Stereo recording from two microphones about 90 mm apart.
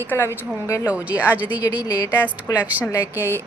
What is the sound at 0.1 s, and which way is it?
Speech, 25° left (ahead or behind).